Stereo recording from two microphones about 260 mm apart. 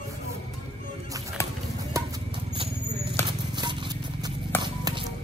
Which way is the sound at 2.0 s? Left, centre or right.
Centre.